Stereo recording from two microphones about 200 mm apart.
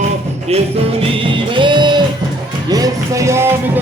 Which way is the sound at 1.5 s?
25° right (ahead or behind).